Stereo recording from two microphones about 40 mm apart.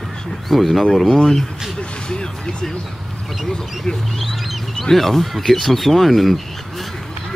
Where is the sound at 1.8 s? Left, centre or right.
Left.